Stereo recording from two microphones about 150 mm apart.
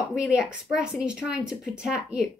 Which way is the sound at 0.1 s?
5° right (ahead or behind).